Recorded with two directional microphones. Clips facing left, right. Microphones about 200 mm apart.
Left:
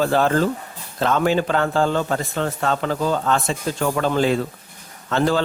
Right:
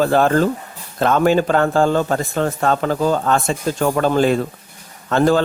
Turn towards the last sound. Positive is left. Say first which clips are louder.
# right 4 dB
turn(degrees=-50)  # may be behind; listen again after turning